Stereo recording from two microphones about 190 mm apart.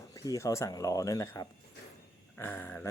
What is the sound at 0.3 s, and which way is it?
Speech, 15° left (ahead or behind).